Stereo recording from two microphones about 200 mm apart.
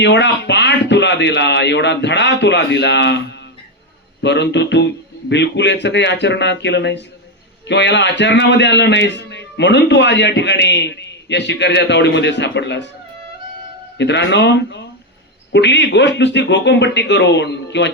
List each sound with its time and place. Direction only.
0.0 s a man's voice: 60° left (ahead or behind)
14.0 s a man's voice: 60° left (ahead or behind)